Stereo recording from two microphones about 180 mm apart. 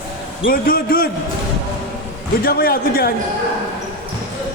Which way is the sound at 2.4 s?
55° left (ahead or behind).